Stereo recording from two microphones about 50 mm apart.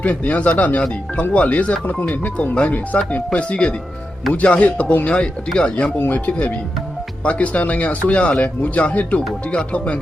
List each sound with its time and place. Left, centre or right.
0.0 s speech: left
6.1 s speech: left